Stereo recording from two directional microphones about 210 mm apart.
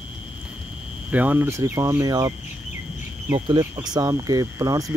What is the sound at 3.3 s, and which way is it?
Speech, 20° right (ahead or behind).